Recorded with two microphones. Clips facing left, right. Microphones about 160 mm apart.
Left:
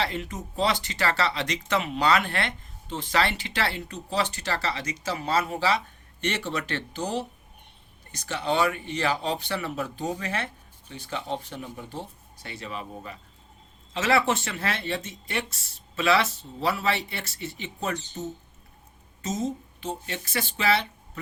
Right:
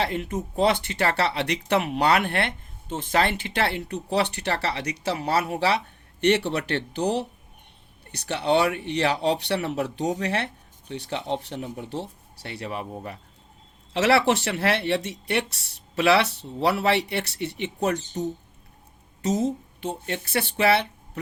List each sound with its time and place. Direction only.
0.0 s speech: 50° right (ahead or behind)
13.9 s speech: 70° right (ahead or behind)
19.2 s speech: 65° right (ahead or behind)